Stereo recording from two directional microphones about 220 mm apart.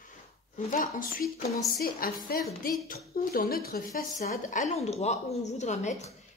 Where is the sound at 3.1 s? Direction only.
40° left (ahead or behind).